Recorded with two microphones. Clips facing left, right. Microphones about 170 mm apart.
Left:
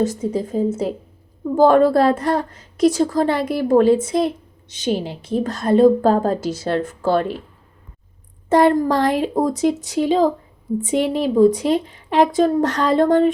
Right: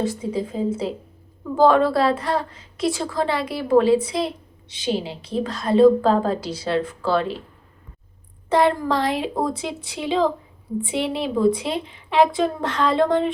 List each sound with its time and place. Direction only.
0.0 s a woman's voice: 45° left (ahead or behind)
8.4 s a woman's voice: 45° left (ahead or behind)